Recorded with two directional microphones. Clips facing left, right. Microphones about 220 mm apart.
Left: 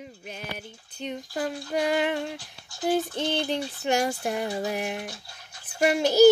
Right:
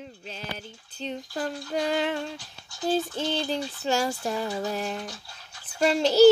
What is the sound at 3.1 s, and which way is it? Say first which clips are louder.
Speech: left 1 dB; 20° left (ahead or behind).